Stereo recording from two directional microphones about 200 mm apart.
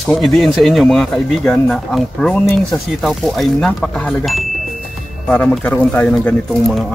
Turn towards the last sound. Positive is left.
turn(degrees=0)  # may be behind; listen again after turning